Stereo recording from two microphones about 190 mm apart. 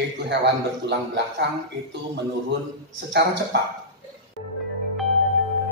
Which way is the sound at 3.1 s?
65° right (ahead or behind).